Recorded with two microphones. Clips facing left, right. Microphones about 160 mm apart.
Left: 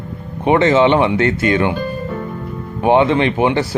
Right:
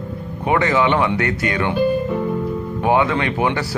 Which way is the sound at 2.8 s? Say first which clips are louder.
Left 5 dB; 25° left (ahead or behind).